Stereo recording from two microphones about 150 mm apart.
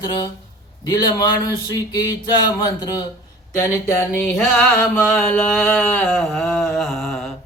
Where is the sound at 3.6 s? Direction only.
15° left (ahead or behind).